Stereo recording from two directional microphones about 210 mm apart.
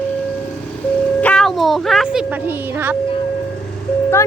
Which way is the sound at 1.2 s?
5° left (ahead or behind).